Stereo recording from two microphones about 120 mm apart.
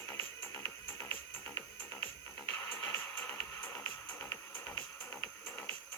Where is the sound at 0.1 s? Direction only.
25° left (ahead or behind).